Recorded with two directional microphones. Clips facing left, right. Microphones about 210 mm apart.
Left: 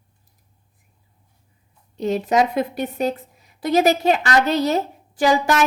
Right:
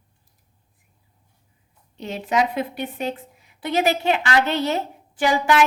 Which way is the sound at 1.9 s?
40° left (ahead or behind).